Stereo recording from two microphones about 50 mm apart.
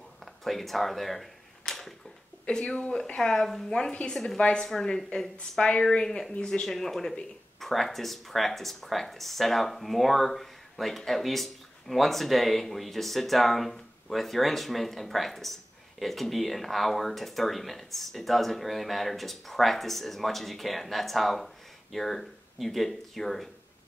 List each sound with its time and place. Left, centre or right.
0.2 s a sound: centre
2.5 s speech: centre
3.2 s speech: centre
3.7 s a woman's voice: centre
4.6 s speech: centre